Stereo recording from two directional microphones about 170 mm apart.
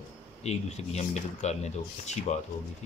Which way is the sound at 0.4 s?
40° left (ahead or behind).